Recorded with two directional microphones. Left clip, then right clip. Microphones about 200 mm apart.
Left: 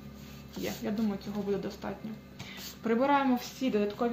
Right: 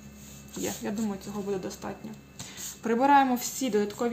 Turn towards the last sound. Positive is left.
turn(degrees=-35)  # may be behind; listen again after turning